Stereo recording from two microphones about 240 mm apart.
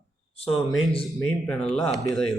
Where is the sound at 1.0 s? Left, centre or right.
Centre.